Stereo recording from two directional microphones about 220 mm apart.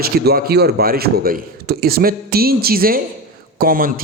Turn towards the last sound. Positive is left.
turn(degrees=-40)  # may be behind; listen again after turning